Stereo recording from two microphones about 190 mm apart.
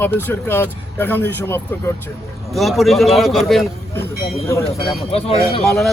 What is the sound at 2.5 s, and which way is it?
A man's voice, centre (ahead or behind).